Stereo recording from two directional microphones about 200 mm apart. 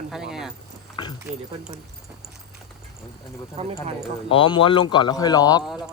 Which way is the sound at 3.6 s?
30° right (ahead or behind).